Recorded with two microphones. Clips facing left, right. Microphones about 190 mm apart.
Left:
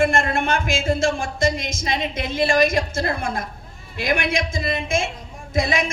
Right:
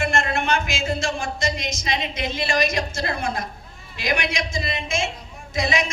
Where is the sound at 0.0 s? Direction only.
50° left (ahead or behind).